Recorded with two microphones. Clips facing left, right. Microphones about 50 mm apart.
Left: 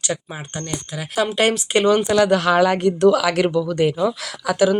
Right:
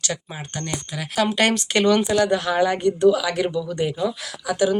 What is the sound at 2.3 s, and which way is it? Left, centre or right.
Speech, left.